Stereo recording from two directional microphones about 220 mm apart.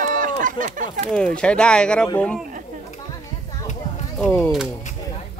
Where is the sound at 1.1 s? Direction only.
5° left (ahead or behind).